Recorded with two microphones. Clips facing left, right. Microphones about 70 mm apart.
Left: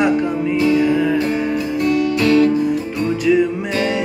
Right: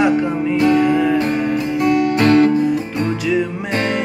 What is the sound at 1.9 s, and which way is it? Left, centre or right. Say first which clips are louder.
Guitar: right 2 dB; right.